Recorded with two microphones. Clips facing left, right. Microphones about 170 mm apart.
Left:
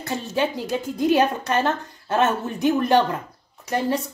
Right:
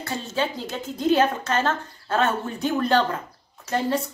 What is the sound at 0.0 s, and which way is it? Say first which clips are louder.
A woman's voice: left 3 dB; 15° left (ahead or behind).